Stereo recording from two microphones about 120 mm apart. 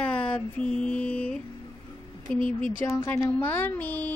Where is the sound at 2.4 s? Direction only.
90° left.